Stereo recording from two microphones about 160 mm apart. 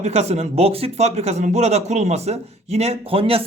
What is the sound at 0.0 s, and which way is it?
A man's voice, 45° right (ahead or behind).